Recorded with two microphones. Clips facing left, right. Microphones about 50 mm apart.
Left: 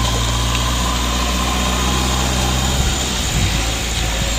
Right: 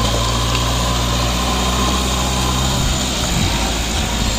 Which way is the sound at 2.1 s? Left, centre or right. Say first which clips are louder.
Even; left.